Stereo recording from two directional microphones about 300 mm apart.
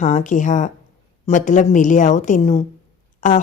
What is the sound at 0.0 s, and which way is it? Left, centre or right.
A woman's voice, left.